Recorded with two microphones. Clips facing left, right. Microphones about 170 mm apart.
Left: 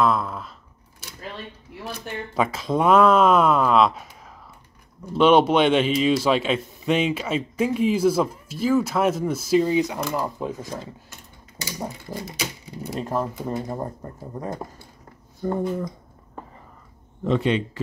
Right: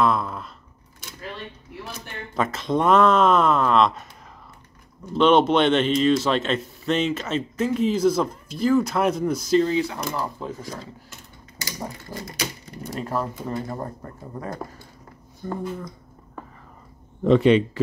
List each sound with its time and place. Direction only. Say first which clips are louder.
0.0 s a sound: even; centre (ahead or behind)
2.3 s a man's voice: even; 5° left (ahead or behind)
5.1 s a man's voice: left 1 dB; 10° left (ahead or behind)
17.2 s a man's voice: right 6 dB; 65° right (ahead or behind)